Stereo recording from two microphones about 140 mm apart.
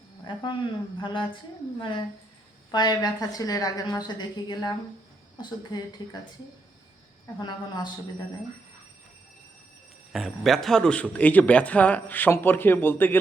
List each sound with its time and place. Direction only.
0.3 s a woman's voice: 35° left (ahead or behind)
10.1 s a man's voice: centre (ahead or behind)